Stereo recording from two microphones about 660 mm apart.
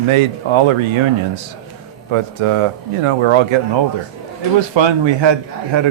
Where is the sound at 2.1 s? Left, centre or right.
Right.